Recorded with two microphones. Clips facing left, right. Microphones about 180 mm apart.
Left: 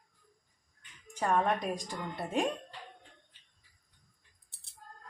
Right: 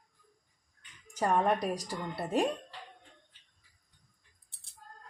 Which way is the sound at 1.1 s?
10° right (ahead or behind).